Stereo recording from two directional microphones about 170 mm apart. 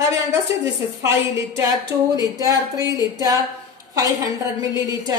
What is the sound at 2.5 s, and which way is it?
Speech, 20° left (ahead or behind).